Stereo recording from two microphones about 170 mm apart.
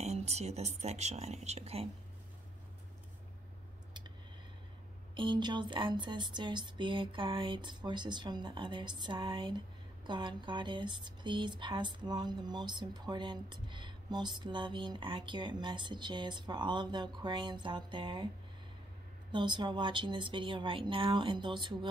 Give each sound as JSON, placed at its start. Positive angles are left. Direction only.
{"t": 0.0, "sound": "speech", "side_deg": -40}
{"t": 5.1, "sound": "speech", "side_deg": -30}
{"t": 19.3, "sound": "speech", "side_deg": -30}